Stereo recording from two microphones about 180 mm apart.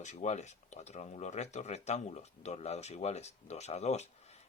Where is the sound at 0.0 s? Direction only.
40° left (ahead or behind).